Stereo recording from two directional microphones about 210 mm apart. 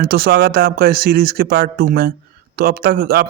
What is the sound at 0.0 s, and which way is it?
A man's voice, 45° right (ahead or behind).